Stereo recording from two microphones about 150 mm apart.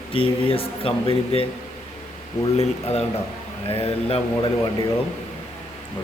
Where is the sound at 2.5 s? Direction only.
45° left (ahead or behind).